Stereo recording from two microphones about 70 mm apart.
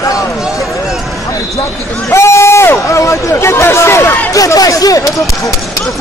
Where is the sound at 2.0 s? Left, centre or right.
Left.